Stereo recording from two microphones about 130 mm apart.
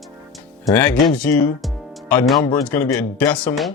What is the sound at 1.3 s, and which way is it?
Speech, 15° left (ahead or behind).